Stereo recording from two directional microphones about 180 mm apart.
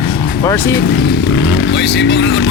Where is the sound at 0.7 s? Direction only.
60° left (ahead or behind).